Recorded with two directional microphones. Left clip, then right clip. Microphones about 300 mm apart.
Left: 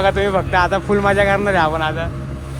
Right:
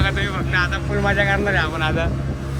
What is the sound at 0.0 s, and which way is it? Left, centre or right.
Speech, centre.